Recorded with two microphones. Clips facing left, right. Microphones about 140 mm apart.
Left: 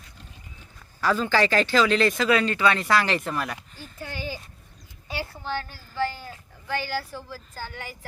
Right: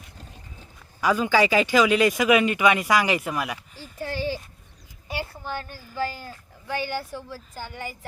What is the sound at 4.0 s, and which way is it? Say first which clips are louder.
Speech: right 6 dB; 35° right (ahead or behind).